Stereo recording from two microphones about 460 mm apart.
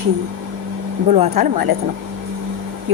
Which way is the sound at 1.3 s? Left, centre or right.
Right.